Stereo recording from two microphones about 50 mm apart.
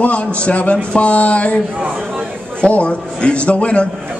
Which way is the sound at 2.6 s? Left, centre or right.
Left.